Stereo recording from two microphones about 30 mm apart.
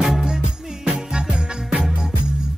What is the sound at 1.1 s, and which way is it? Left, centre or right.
Music, right.